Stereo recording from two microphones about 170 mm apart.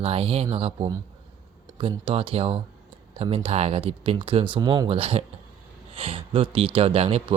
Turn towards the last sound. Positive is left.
turn(degrees=-35)  # may be behind; listen again after turning